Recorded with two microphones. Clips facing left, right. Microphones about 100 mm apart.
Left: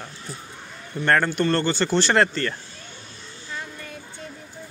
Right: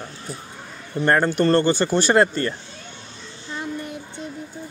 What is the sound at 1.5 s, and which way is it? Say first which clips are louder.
Speech: right 3 dB; 15° right (ahead or behind).